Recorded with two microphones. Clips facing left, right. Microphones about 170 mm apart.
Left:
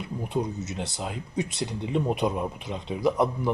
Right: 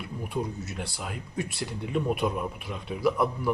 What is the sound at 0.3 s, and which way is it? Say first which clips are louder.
Speech: left 3 dB; 20° left (ahead or behind).